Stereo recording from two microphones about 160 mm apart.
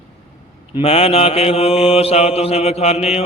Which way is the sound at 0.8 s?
35° left (ahead or behind).